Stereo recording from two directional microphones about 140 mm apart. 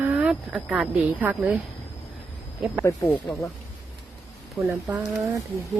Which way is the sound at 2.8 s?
20° left (ahead or behind).